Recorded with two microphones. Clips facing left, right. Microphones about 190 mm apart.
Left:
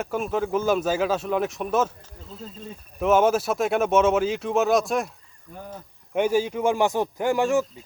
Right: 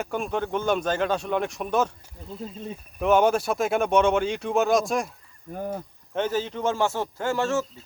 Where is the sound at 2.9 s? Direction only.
Centre (ahead or behind).